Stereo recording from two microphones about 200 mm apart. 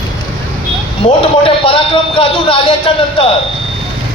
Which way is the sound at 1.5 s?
25° left (ahead or behind).